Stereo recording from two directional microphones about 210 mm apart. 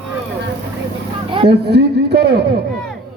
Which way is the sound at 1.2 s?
25° right (ahead or behind).